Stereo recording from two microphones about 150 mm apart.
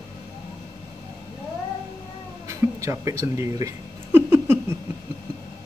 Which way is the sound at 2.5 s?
20° right (ahead or behind).